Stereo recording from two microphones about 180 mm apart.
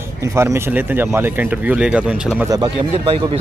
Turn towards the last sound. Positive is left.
turn(degrees=-30)  # may be behind; listen again after turning